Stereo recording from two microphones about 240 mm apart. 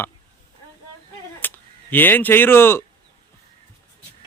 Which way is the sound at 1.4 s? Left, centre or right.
Centre.